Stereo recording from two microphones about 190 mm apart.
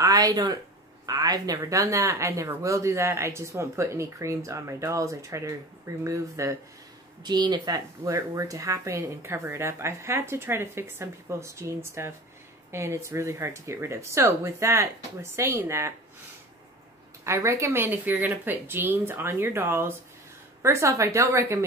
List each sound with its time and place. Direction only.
0.0 s speech: 20° right (ahead or behind)
17.2 s speech: 15° right (ahead or behind)